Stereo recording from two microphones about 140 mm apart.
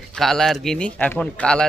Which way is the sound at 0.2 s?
Centre (ahead or behind).